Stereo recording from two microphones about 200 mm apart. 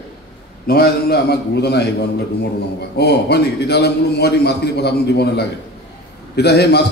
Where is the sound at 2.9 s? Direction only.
55° left (ahead or behind).